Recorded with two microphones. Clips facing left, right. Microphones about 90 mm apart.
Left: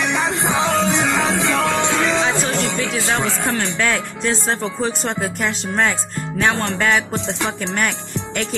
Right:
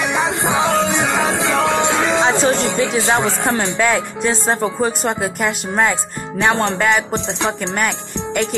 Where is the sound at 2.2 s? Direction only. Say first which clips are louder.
Right 4 dB; 20° right (ahead or behind).